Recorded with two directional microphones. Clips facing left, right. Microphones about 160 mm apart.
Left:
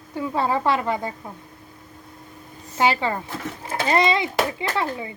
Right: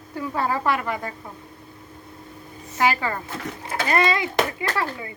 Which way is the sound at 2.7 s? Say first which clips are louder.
Left 1 dB; 25° left (ahead or behind).